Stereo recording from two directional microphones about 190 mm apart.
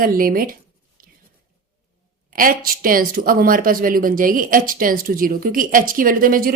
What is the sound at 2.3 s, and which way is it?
Speech, 45° right (ahead or behind).